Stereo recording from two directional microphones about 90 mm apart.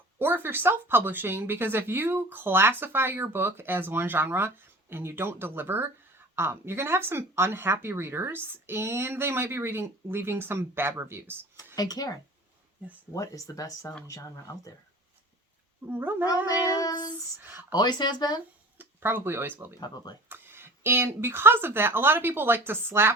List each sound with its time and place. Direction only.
0.2 s speech: 20° right (ahead or behind)
11.8 s speech: 45° left (ahead or behind)
15.9 s speech: 25° right (ahead or behind)
16.5 s speech: 40° left (ahead or behind)
17.4 s speech: 20° right (ahead or behind)
17.7 s speech: 50° left (ahead or behind)
18.8 s speech: 25° right (ahead or behind)